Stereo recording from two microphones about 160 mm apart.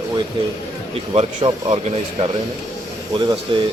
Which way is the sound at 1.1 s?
45° right (ahead or behind).